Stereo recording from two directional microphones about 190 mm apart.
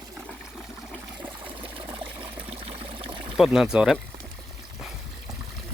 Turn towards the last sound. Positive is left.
turn(degrees=-5)  # may be behind; listen again after turning